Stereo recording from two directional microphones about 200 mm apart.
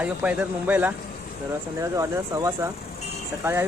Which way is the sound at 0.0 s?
5° right (ahead or behind).